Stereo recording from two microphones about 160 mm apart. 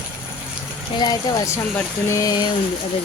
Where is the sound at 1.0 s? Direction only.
25° left (ahead or behind).